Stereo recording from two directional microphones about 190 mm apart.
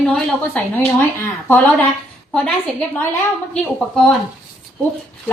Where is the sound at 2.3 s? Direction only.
5° left (ahead or behind).